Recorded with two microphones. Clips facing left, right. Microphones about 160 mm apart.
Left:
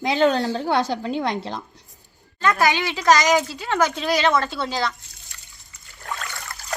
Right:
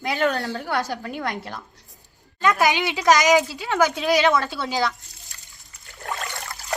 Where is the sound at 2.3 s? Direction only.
10° right (ahead or behind).